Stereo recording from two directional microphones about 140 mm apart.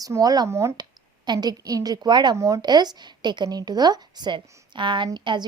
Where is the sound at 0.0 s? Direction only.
25° right (ahead or behind).